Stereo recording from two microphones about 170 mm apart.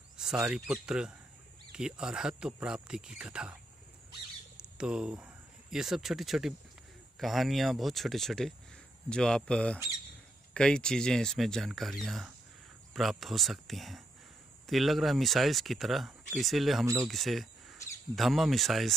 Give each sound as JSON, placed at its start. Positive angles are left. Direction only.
{"t": 0.2, "sound": "speech", "side_deg": -5}
{"t": 4.7, "sound": "speech", "side_deg": -5}
{"t": 16.8, "sound": "speech", "side_deg": -15}
{"t": 17.1, "sound": "cricket", "side_deg": 0}